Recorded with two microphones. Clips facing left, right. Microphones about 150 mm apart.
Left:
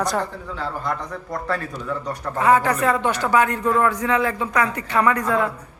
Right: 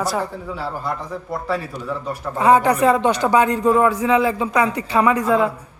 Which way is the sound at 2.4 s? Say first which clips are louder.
Right 3 dB; 20° right (ahead or behind).